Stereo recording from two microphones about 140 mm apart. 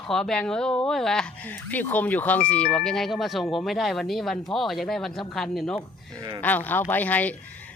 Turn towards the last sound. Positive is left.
turn(degrees=10)  # may be behind; listen again after turning